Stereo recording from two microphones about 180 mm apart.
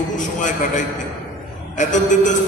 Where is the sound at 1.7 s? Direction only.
45° left (ahead or behind).